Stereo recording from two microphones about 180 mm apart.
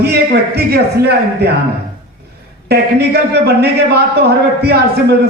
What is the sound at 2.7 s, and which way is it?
Speech, 65° right (ahead or behind).